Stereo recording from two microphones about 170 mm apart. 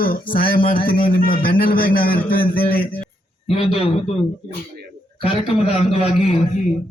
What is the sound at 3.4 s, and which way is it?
Speech, 35° left (ahead or behind).